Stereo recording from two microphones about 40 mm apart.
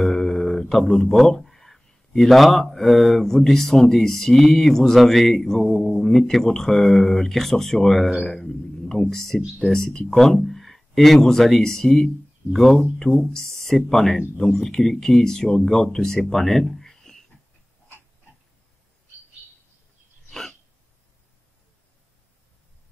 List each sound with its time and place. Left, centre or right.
0.0 s speech: centre
20.2 s hiccup: centre